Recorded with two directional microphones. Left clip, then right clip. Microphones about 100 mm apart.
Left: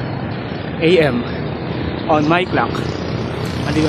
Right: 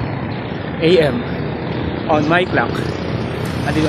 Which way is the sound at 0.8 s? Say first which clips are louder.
Even; 30° left (ahead or behind).